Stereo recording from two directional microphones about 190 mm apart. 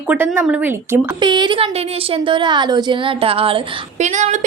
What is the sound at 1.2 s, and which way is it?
A woman's voice, 25° right (ahead or behind).